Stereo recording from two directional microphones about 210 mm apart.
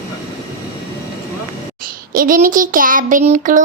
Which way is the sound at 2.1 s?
40° right (ahead or behind).